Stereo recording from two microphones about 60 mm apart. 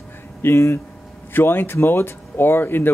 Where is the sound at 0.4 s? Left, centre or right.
Left.